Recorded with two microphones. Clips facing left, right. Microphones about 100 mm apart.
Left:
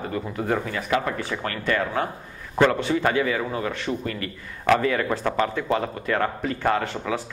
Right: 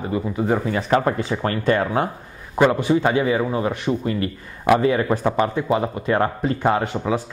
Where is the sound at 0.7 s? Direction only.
35° right (ahead or behind).